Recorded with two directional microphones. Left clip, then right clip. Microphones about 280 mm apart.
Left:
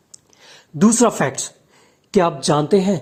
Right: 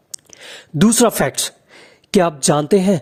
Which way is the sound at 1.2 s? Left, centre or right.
Right.